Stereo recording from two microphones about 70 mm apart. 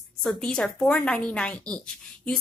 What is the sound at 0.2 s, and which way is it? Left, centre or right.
A woman's voice, centre.